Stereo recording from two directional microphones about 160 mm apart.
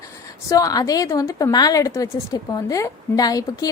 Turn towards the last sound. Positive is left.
turn(degrees=25)  # may be behind; listen again after turning